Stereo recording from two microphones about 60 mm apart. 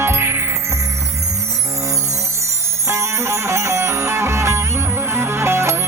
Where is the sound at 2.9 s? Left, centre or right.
Right.